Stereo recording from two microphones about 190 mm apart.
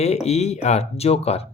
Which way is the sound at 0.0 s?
35° left (ahead or behind).